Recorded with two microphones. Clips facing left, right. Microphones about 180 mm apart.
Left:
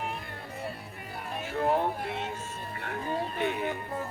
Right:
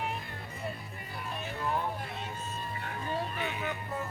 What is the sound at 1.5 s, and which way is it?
Music, 60° left (ahead or behind).